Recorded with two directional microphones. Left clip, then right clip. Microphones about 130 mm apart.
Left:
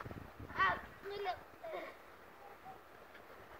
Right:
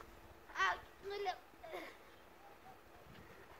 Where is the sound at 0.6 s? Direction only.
20° right (ahead or behind).